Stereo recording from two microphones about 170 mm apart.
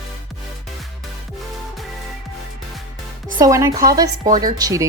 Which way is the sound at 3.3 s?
20° right (ahead or behind).